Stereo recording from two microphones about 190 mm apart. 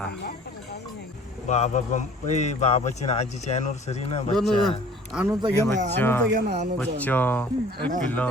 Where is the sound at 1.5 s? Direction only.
35° left (ahead or behind).